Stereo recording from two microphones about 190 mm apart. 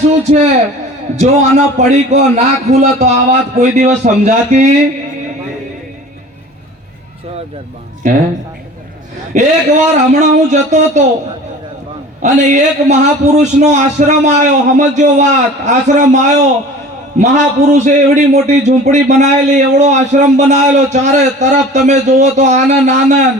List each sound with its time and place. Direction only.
0.2 s a man's voice: 35° right (ahead or behind)
9.3 s a man's voice: 40° right (ahead or behind)
12.2 s a man's voice: 40° right (ahead or behind)